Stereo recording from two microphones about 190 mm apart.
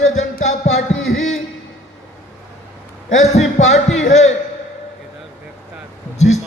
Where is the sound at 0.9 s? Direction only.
90° left.